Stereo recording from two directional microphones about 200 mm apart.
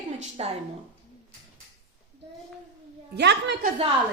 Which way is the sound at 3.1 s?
60° right (ahead or behind).